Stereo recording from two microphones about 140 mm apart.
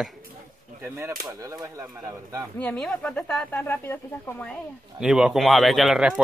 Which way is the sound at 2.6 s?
5° left (ahead or behind).